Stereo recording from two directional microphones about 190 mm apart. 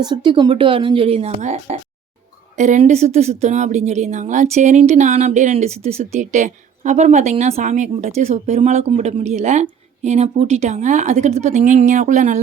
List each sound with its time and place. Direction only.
0.0 s speech: 25° right (ahead or behind); by 12.4 s 40° right (ahead or behind)